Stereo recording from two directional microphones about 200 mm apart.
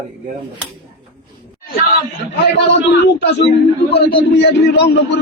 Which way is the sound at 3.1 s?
60° left (ahead or behind).